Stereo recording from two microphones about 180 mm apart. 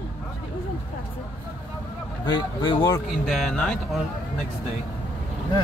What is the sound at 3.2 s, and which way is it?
Speech, centre (ahead or behind).